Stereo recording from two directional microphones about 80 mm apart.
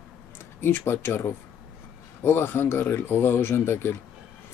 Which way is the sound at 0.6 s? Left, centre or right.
Left.